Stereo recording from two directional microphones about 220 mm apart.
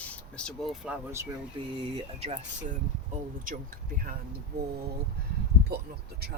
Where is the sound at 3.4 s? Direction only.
40° right (ahead or behind).